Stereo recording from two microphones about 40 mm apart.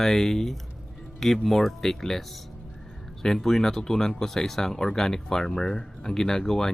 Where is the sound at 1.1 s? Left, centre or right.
Centre.